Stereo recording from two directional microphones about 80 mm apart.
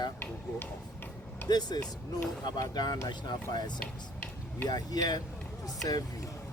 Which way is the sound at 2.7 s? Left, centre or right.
Left.